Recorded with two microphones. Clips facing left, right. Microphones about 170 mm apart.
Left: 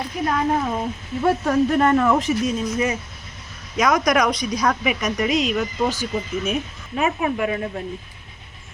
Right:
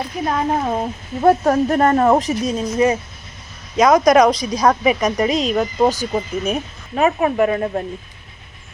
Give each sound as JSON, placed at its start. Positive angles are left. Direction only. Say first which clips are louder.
{"t": 0.3, "sound": "speech", "louder": "right 3 dB", "side_deg": -35}